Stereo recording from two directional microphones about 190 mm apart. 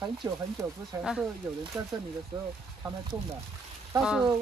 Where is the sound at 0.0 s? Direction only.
20° right (ahead or behind).